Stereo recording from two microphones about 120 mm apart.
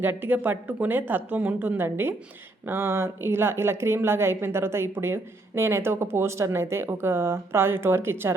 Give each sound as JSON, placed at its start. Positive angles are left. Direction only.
{"t": 0.0, "sound": "a woman's voice", "side_deg": -15}